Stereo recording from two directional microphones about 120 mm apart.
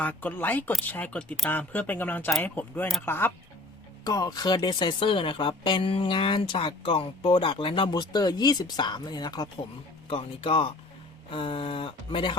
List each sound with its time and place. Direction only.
0.0 s speech: 15° left (ahead or behind)
4.0 s speech: 30° left (ahead or behind)
10.1 s speech: 55° left (ahead or behind)